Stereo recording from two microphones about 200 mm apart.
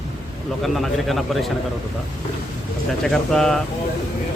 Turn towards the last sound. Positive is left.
turn(degrees=5)  # may be behind; listen again after turning